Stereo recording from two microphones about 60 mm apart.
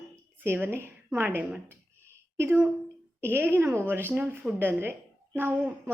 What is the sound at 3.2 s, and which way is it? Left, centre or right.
A woman's voice, right.